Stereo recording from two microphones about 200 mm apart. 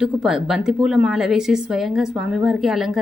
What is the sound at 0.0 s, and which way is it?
Speech, 5° right (ahead or behind).